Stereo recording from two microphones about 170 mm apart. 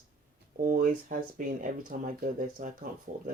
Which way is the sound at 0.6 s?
50° right (ahead or behind).